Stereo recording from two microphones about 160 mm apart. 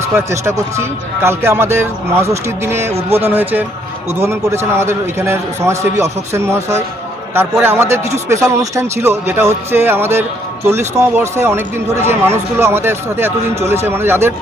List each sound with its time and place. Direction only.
0.2 s a man's voice: 20° right (ahead or behind)
2.9 s speech: 40° right (ahead or behind)
3.2 s a man's voice: 10° right (ahead or behind)